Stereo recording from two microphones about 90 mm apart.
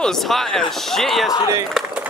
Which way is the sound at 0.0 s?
5° left (ahead or behind).